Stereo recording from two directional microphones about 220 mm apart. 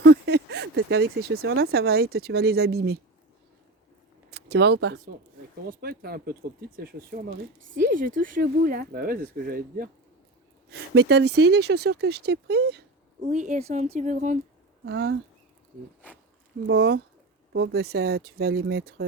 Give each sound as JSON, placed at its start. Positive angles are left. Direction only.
{"t": 0.0, "sound": "a sound", "side_deg": -50}
{"t": 1.7, "sound": "speech", "side_deg": -45}
{"t": 4.3, "sound": "speech", "side_deg": -50}
{"t": 13.2, "sound": "speech", "side_deg": -35}
{"t": 14.8, "sound": "speech", "side_deg": -50}
{"t": 16.6, "sound": "speech", "side_deg": -45}